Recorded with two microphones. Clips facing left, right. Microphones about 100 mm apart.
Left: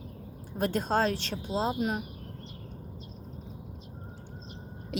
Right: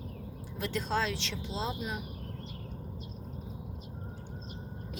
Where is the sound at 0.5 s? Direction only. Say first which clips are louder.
Left 5 dB; 45° left (ahead or behind).